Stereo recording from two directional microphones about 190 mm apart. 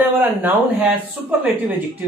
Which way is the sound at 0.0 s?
10° right (ahead or behind).